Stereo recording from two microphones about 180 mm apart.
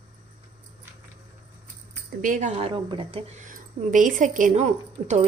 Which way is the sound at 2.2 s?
45° right (ahead or behind).